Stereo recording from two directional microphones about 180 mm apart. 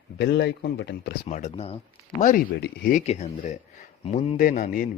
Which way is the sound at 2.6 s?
50° left (ahead or behind).